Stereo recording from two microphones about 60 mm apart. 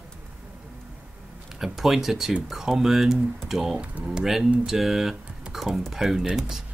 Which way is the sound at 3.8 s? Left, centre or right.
Centre.